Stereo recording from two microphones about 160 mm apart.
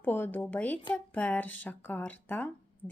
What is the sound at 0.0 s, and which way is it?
Speech, 15° left (ahead or behind).